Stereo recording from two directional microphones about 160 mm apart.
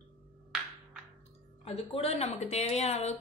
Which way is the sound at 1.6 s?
40° left (ahead or behind).